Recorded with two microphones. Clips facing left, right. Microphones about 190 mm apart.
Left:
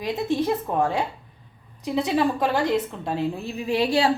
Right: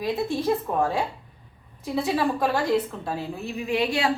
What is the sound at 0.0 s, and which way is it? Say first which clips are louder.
A woman's voice: left 1 dB; 20° left (ahead or behind).